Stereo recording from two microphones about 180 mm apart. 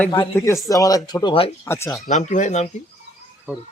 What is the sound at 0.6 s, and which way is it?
Speech, 20° left (ahead or behind).